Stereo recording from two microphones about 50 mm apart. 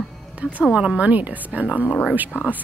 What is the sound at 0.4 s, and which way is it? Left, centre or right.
Speech, right.